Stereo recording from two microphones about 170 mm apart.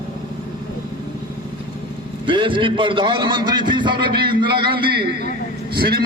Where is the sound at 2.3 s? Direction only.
30° right (ahead or behind).